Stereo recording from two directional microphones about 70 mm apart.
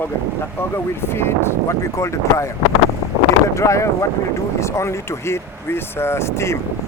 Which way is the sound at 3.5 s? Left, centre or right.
Left.